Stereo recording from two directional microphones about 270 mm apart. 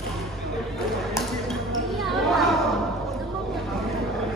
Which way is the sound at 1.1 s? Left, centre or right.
Centre.